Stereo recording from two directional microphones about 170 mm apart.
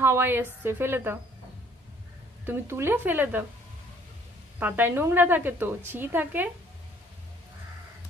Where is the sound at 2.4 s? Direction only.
15° right (ahead or behind).